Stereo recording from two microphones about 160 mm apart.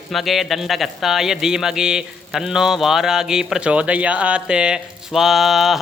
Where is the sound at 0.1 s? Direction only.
Centre (ahead or behind).